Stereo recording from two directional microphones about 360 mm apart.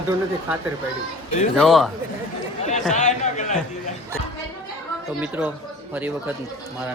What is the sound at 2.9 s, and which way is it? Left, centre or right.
Speech, centre.